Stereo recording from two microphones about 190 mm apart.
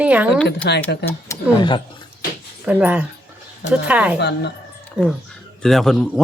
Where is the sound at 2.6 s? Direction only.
5° right (ahead or behind).